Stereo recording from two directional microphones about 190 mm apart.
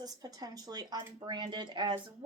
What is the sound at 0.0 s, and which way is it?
A woman's voice, 20° right (ahead or behind).